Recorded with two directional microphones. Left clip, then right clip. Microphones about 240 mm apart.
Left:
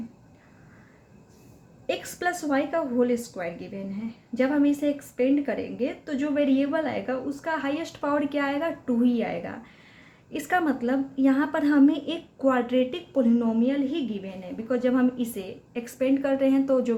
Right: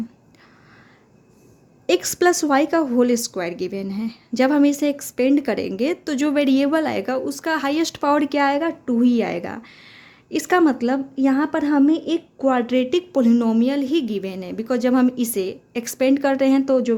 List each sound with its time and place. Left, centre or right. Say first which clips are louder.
1.9 s a woman's voice: right 10 dB; right